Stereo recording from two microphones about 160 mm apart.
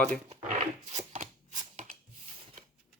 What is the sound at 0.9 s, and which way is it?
Shuffling cards, 50° right (ahead or behind).